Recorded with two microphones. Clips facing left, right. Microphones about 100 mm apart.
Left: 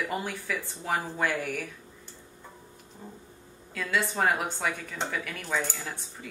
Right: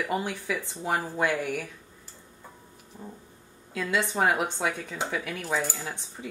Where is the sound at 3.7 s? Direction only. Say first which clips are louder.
Right 2 dB; 20° right (ahead or behind).